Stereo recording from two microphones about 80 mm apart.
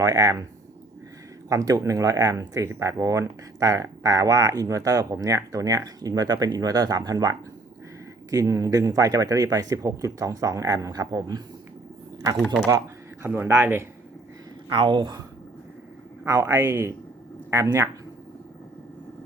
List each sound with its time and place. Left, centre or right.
0.0 s speech: right
1.5 s speech: right
13.2 s speech: right
14.7 s speech: right
16.2 s speech: right